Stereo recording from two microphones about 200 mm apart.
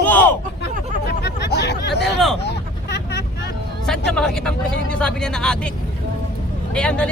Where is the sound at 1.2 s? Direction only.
55° left (ahead or behind).